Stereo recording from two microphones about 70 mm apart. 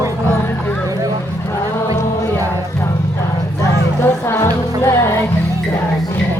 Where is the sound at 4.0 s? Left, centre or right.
Left.